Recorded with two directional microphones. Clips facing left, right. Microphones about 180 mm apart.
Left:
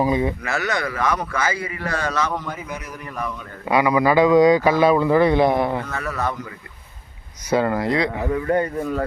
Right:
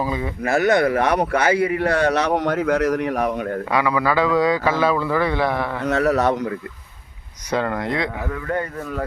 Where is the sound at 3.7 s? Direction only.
15° left (ahead or behind).